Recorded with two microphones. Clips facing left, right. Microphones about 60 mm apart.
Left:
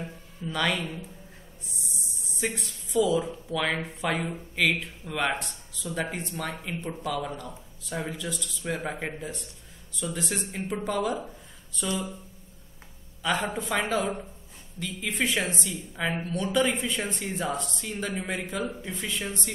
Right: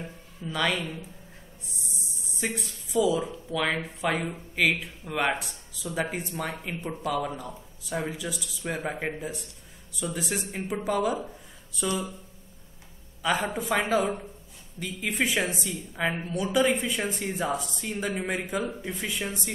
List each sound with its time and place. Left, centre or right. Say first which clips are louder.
0.4 s a woman's voice: even; centre
13.2 s a woman's voice: right 1 dB; centre